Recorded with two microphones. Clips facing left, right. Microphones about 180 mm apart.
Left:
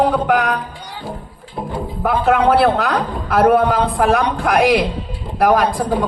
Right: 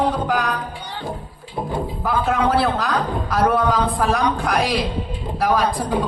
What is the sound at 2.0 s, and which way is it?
A woman's voice, 60° left (ahead or behind).